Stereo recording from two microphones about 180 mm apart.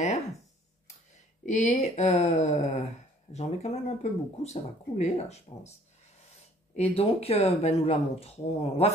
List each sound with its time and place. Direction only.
1.4 s speech: 40° left (ahead or behind)
6.7 s speech: 35° left (ahead or behind)